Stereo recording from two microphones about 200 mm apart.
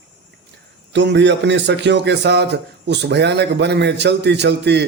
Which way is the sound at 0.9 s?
60° right (ahead or behind).